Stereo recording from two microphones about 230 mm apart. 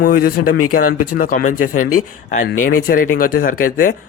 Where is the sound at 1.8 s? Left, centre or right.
Left.